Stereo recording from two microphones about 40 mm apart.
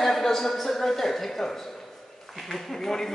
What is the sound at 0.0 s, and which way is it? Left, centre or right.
A man's voice, centre.